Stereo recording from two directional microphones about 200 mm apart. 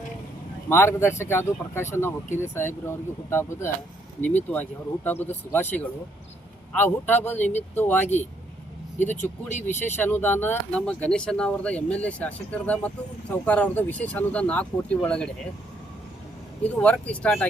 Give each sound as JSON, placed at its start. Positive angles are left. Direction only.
{"t": 0.7, "sound": "speech", "side_deg": 15}
{"t": 9.1, "sound": "speech", "side_deg": 35}
{"t": 9.6, "sound": "speech", "side_deg": 10}
{"t": 16.8, "sound": "speech", "side_deg": 5}